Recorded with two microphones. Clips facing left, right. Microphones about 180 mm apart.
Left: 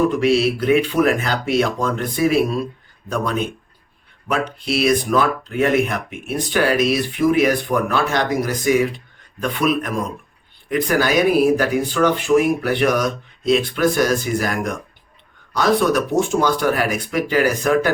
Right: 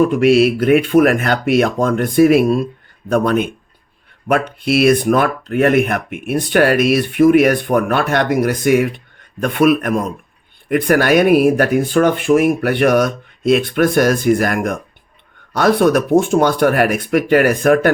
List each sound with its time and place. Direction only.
0.2 s speech: 50° right (ahead or behind)